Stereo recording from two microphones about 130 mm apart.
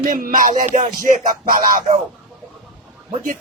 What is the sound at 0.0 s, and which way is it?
Music, 90° right.